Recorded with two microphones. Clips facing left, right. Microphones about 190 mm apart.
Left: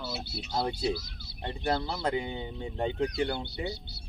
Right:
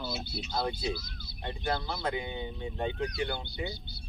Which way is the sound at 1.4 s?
30° left (ahead or behind).